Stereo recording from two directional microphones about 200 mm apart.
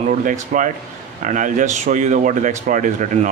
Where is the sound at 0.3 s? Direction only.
40° right (ahead or behind).